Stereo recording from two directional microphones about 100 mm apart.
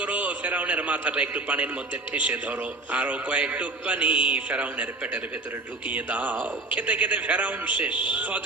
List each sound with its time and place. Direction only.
0.0 s a man's voice: 15° right (ahead or behind)